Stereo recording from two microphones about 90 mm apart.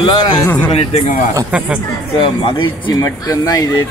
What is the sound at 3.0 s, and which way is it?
Speech, 40° left (ahead or behind).